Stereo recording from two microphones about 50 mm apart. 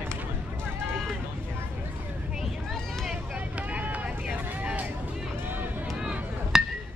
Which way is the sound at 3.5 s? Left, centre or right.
Right.